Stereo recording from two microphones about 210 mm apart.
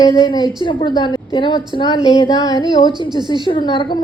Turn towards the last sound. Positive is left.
turn(degrees=20)  # may be behind; listen again after turning